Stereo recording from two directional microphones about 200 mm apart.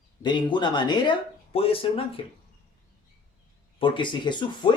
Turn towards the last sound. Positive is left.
turn(degrees=25)  # may be behind; listen again after turning